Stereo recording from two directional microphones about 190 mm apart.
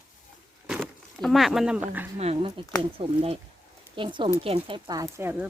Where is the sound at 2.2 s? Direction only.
30° right (ahead or behind); by 5.4 s 15° right (ahead or behind).